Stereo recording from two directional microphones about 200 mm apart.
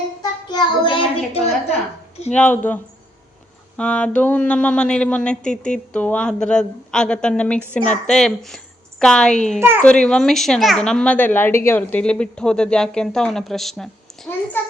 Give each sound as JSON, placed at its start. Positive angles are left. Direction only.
{"t": 0.2, "sound": "child singing", "side_deg": 20}
{"t": 2.3, "sound": "a woman's voice", "side_deg": 10}
{"t": 9.6, "sound": "a child's voice", "side_deg": -10}
{"t": 9.8, "sound": "a woman's voice", "side_deg": 5}